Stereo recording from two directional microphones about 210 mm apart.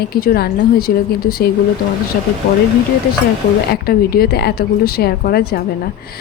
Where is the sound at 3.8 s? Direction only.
45° left (ahead or behind).